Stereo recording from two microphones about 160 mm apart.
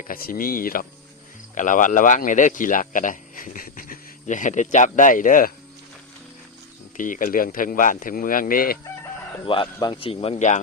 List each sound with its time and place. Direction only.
0.1 s speech: 65° left (ahead or behind)
6.9 s speech: 55° left (ahead or behind)
9.4 s speech: 35° left (ahead or behind)